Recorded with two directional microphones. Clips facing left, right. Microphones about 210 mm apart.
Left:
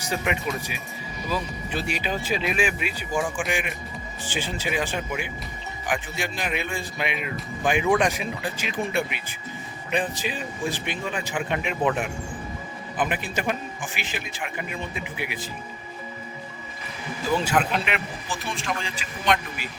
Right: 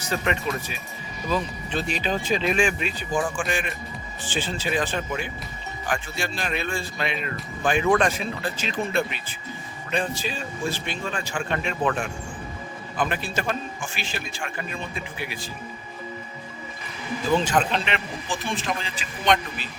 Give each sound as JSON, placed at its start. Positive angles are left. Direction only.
{"t": 0.0, "sound": "speech", "side_deg": 15}
{"t": 17.3, "sound": "speech", "side_deg": 10}